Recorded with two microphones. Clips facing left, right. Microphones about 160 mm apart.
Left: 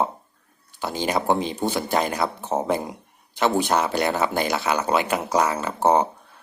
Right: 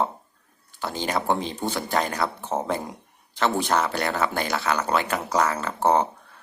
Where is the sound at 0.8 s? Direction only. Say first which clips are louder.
Left 3 dB; 15° left (ahead or behind).